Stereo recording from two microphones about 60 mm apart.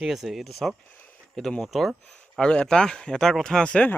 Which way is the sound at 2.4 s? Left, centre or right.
Centre.